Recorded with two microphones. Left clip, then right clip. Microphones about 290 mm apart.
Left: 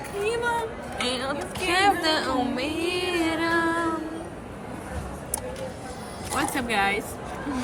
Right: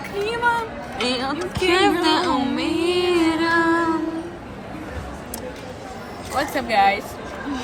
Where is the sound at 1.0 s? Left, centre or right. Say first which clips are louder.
Right 5 dB; centre.